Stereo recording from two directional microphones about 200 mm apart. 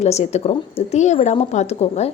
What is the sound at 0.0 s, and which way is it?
Speech, 35° left (ahead or behind).